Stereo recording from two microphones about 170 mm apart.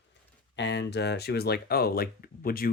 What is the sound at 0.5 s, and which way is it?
Speech, 90° left.